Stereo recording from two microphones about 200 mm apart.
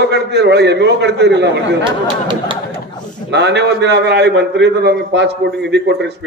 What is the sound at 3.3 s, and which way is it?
A man's voice, 60° right (ahead or behind).